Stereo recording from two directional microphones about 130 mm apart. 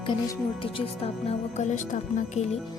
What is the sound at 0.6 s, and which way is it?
Speech, 50° left (ahead or behind).